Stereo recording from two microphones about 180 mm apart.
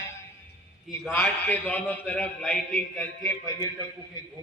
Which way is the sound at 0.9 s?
Centre (ahead or behind).